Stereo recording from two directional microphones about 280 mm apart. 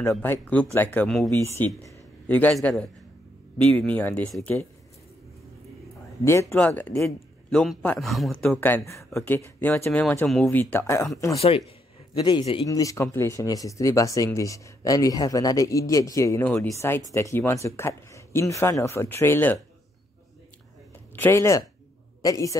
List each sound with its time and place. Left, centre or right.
0.1 s a man's voice: centre
6.2 s a man's voice: centre
11.3 s speech: left
21.2 s speech: centre